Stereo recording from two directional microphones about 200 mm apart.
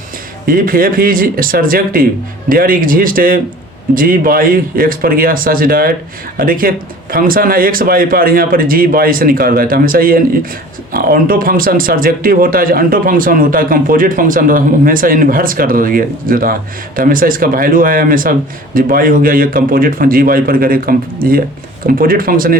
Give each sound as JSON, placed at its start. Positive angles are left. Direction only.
{"t": 0.4, "sound": "speech", "side_deg": -45}